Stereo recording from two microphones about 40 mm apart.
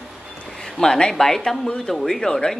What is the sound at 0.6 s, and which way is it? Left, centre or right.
Speech, centre.